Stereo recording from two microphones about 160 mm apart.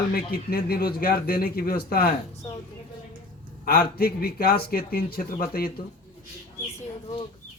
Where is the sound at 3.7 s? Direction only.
70° left (ahead or behind).